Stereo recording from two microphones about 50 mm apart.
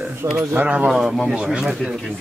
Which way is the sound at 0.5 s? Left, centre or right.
Right.